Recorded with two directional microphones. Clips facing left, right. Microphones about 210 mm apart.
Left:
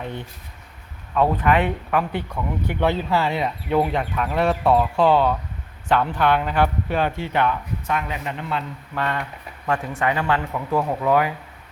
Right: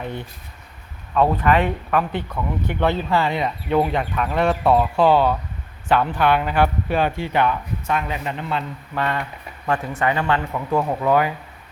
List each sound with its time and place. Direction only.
1.1 s speech: 15° left (ahead or behind); by 7.5 s 10° right (ahead or behind)
7.9 s a man's voice: 30° right (ahead or behind)
9.0 s speech: 10° right (ahead or behind)